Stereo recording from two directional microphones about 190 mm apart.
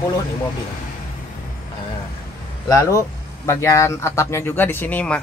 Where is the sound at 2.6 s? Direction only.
15° left (ahead or behind).